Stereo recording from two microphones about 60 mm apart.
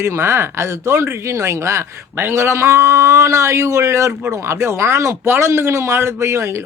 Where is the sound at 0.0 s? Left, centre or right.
Right.